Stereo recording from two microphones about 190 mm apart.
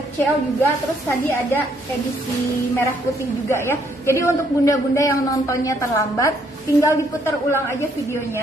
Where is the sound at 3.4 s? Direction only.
15° left (ahead or behind).